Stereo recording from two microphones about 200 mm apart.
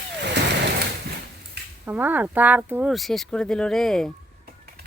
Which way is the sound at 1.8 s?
10° right (ahead or behind).